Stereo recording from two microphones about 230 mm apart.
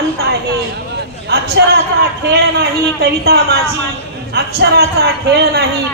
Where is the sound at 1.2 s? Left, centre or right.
Right.